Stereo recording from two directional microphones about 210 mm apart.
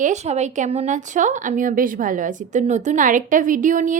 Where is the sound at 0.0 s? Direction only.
35° right (ahead or behind).